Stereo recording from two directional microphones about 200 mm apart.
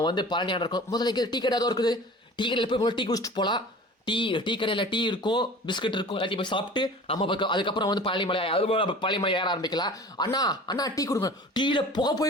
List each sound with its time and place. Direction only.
0.0 s speech: 20° left (ahead or behind)